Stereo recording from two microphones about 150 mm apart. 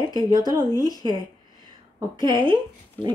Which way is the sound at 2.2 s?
30° right (ahead or behind).